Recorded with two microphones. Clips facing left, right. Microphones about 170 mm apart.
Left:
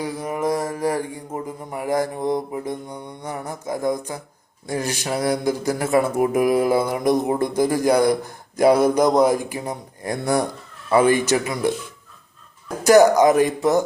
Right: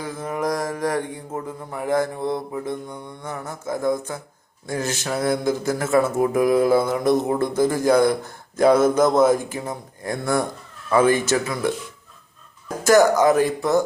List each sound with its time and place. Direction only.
0.0 s mantra: 10° left (ahead or behind)
12.8 s mantra: 15° left (ahead or behind)